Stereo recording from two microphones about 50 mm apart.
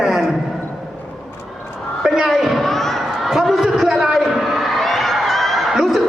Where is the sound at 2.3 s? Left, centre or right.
Centre.